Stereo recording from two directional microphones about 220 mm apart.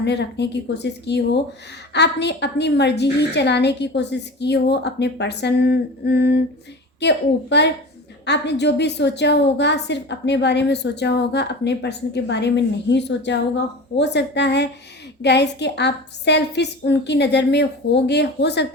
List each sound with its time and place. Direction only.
0.0 s a woman's voice: 50° left (ahead or behind)